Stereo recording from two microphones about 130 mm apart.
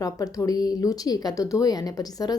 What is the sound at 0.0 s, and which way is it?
A woman's voice, 25° left (ahead or behind).